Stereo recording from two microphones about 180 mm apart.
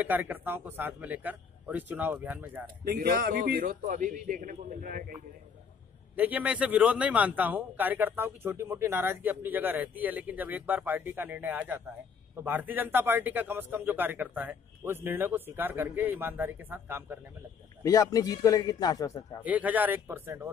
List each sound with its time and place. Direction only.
0.0 s a man's voice: 10° right (ahead or behind)
2.8 s a man's voice: 60° right (ahead or behind)
6.1 s a man's voice: 10° right (ahead or behind)
17.8 s a man's voice: 20° left (ahead or behind)
19.4 s a man's voice: 10° right (ahead or behind)